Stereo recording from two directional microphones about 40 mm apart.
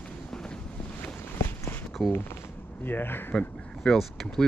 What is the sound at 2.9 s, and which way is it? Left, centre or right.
Speech, left.